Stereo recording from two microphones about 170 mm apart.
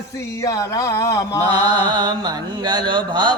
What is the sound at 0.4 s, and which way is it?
Speech, 15° left (ahead or behind).